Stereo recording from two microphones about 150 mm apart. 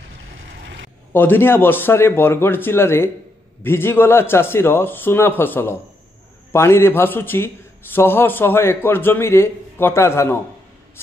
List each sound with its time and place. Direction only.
1.1 s a man's voice: 15° left (ahead or behind)